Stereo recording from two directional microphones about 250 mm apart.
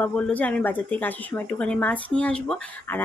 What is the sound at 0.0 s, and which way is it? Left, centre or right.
A woman's voice, centre.